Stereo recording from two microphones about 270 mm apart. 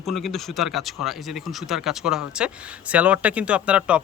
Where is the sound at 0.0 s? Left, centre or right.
Centre.